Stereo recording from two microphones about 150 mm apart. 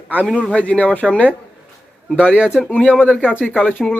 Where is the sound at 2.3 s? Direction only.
5° right (ahead or behind).